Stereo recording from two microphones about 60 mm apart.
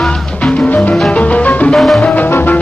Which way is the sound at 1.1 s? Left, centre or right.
Left.